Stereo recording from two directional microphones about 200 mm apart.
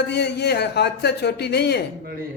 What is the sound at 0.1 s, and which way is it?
A man's voice, 55° left (ahead or behind).